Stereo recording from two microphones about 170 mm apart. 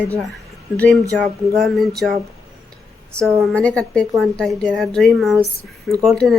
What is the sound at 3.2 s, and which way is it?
Speech, 15° right (ahead or behind).